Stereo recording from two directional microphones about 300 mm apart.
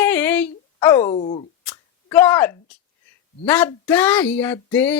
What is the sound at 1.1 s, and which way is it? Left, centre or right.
Speech, centre.